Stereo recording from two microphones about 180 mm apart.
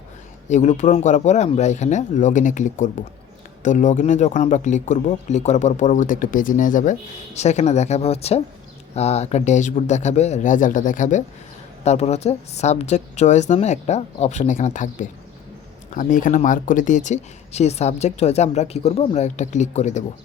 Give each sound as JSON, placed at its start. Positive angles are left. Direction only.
{"t": 0.4, "sound": "speech", "side_deg": 40}
{"t": 16.0, "sound": "speech", "side_deg": 45}